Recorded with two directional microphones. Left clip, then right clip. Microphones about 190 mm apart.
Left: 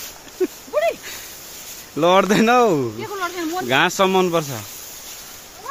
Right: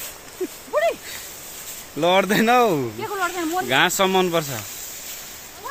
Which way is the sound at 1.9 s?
25° left (ahead or behind).